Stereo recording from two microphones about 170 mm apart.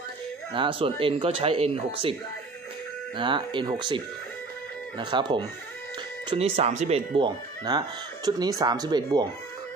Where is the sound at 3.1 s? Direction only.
30° right (ahead or behind).